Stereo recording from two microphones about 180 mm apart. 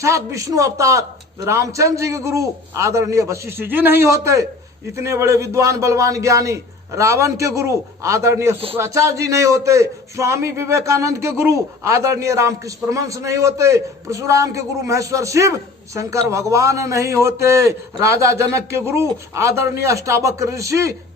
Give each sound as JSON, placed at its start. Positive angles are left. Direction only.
{"t": 0.0, "sound": "a man's voice", "side_deg": -15}